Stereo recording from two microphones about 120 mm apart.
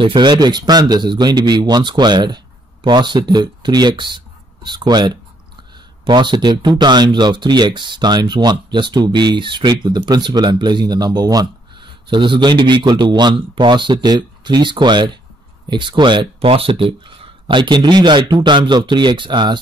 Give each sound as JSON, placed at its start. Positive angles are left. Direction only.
{"t": 0.0, "sound": "speech", "side_deg": -40}